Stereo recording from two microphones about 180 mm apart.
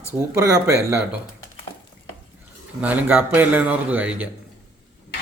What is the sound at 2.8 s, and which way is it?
A man's voice, 10° right (ahead or behind).